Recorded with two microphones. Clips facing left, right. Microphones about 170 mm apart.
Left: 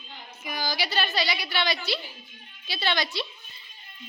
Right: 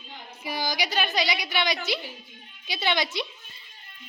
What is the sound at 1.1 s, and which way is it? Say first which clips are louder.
A woman's voice: right 1 dB; 20° right (ahead or behind).